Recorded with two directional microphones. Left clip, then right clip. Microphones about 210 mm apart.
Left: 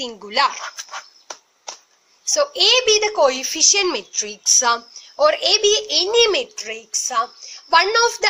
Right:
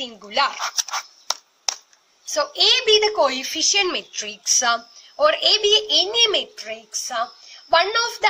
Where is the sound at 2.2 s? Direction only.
15° left (ahead or behind).